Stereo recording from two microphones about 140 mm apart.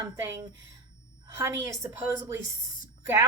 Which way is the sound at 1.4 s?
20° right (ahead or behind).